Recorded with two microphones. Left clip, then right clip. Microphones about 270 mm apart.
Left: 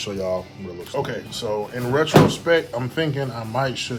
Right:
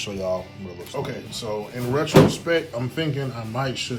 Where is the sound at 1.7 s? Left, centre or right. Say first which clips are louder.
Left 3 dB; left.